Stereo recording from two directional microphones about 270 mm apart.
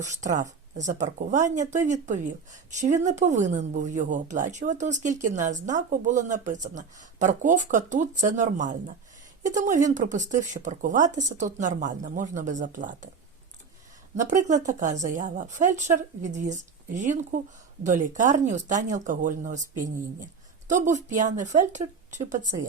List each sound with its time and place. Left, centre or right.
0.0 s speech: right
14.2 s speech: right
20.7 s speech: right